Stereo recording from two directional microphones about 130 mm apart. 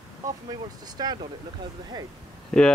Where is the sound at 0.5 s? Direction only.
30° right (ahead or behind).